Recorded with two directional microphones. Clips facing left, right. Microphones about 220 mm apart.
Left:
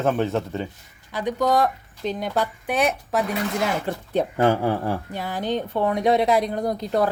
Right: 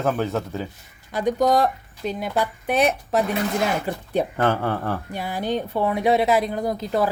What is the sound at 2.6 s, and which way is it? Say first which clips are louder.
Speech: right 5 dB; 30° right (ahead or behind).